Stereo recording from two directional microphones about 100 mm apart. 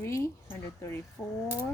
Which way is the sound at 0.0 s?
25° left (ahead or behind).